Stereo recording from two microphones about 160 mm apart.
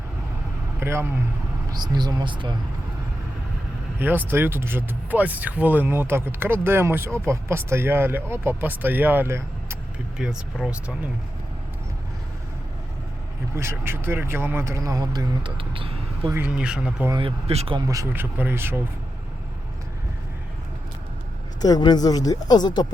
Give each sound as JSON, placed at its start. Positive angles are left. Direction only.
{"t": 0.8, "sound": "speech", "side_deg": -15}
{"t": 1.7, "sound": "speech", "side_deg": -25}
{"t": 3.9, "sound": "speech", "side_deg": -10}
{"t": 10.2, "sound": "speech", "side_deg": -5}
{"t": 13.6, "sound": "speech", "side_deg": -15}
{"t": 16.3, "sound": "speech", "side_deg": -10}
{"t": 17.2, "sound": "speech", "side_deg": -35}
{"t": 17.7, "sound": "speech", "side_deg": -20}
{"t": 21.6, "sound": "speech", "side_deg": 25}